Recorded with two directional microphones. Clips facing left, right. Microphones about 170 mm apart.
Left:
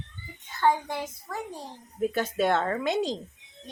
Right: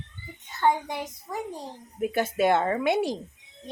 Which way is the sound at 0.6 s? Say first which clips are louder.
Even; 20° right (ahead or behind).